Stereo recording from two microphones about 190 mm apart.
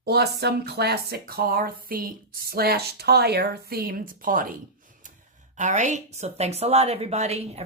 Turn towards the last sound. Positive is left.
turn(degrees=-35)  # may be behind; listen again after turning